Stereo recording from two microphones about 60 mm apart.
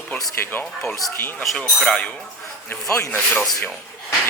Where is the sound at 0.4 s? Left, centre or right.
Left.